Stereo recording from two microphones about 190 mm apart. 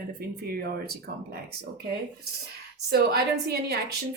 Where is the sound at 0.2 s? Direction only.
55° right (ahead or behind).